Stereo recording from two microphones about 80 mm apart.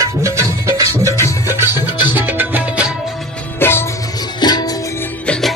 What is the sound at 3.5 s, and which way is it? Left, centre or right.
Music, left.